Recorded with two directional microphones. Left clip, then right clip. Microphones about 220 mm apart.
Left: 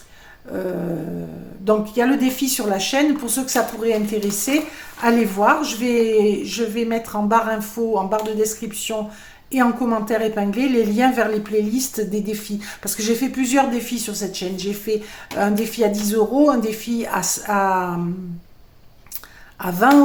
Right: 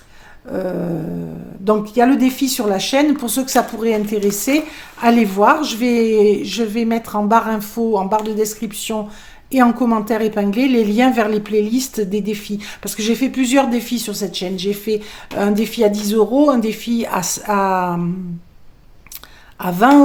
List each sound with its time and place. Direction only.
0.5 s speech: 35° right (ahead or behind)
19.5 s a woman's voice: 30° right (ahead or behind)